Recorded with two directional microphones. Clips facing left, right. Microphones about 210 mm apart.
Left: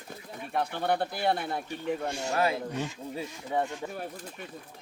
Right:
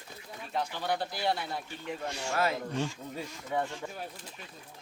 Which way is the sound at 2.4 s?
15° left (ahead or behind).